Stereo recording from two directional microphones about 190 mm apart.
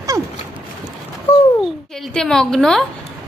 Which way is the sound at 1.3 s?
10° left (ahead or behind).